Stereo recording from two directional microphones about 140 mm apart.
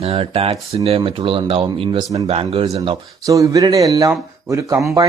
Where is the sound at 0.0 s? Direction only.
40° right (ahead or behind).